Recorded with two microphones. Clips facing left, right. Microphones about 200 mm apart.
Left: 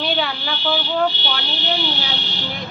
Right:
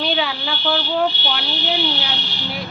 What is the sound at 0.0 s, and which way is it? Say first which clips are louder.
Speech: right 1 dB; centre (ahead or behind).